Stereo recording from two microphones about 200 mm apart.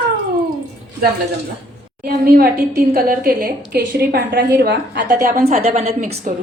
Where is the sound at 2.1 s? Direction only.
50° right (ahead or behind).